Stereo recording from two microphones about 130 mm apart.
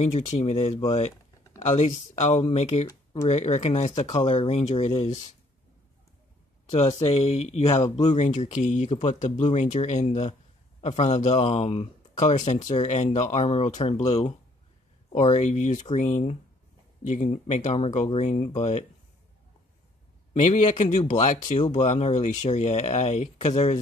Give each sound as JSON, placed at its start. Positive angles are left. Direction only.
{"t": 0.0, "sound": "speech", "side_deg": 65}
{"t": 7.1, "sound": "speech", "side_deg": 55}
{"t": 20.3, "sound": "speech", "side_deg": 60}